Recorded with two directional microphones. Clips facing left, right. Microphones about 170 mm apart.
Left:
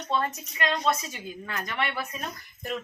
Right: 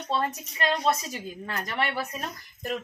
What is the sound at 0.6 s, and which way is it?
Speech, 35° right (ahead or behind).